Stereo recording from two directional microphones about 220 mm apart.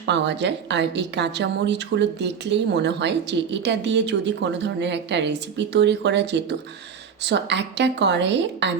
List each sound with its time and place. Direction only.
0.0 s a woman's voice: 50° right (ahead or behind)